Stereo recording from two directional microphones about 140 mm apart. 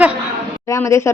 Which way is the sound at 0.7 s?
20° left (ahead or behind).